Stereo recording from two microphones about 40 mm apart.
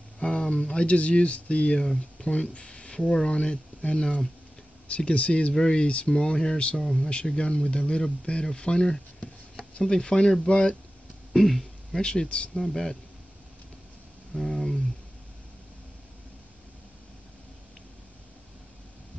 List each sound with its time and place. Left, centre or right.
0.2 s speech: left
5.5 s speech: centre
5.8 s speech: left
9.8 s speech: left
11.3 s throat clearing: centre
12.0 s speech: left
14.3 s speech: centre